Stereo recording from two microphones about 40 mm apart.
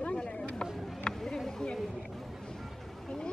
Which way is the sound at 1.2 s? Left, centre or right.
Centre.